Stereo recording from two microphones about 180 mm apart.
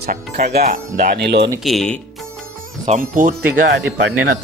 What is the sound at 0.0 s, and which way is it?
Music, 45° right (ahead or behind).